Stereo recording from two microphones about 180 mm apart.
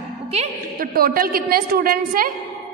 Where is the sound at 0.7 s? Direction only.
55° right (ahead or behind).